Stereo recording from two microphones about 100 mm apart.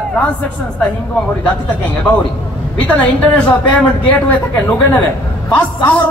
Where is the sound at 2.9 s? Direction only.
15° left (ahead or behind).